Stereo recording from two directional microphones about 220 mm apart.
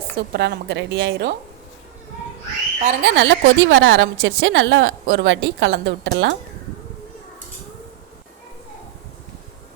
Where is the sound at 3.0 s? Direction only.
55° right (ahead or behind).